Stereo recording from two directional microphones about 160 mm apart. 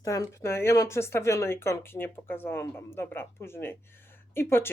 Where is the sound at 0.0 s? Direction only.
20° left (ahead or behind).